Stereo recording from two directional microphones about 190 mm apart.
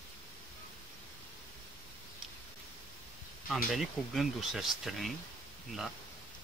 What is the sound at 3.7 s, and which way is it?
Speech, centre (ahead or behind).